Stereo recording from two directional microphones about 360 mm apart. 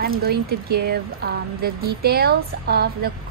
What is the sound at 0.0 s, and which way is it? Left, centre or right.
A woman's voice, right.